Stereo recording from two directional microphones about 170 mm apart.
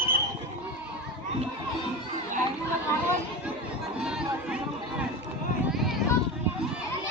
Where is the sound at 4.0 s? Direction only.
5° right (ahead or behind).